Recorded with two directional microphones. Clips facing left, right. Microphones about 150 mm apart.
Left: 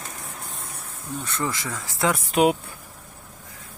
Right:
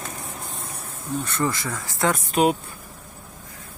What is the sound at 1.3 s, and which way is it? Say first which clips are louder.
Speech: right 1 dB; centre (ahead or behind).